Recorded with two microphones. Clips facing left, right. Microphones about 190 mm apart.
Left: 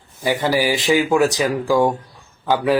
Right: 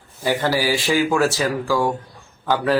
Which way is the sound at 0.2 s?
15° left (ahead or behind).